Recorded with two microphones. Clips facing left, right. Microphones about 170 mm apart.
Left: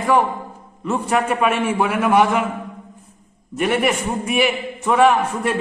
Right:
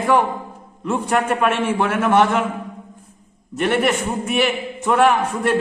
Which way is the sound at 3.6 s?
5° left (ahead or behind).